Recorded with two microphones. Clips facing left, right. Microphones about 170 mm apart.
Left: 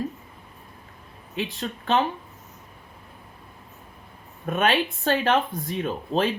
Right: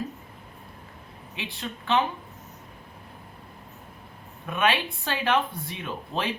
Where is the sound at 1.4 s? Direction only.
40° left (ahead or behind).